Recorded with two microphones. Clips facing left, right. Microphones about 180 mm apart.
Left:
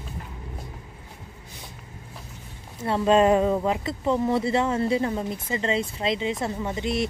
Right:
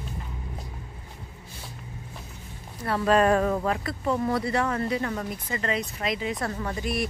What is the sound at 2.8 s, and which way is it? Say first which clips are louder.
Speech: left 2 dB; 25° left (ahead or behind).